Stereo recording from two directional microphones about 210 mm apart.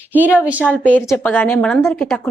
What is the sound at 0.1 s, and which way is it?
Speech, 5° right (ahead or behind).